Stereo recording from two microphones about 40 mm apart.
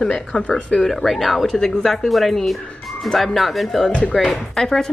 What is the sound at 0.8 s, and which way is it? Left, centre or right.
Speech, centre.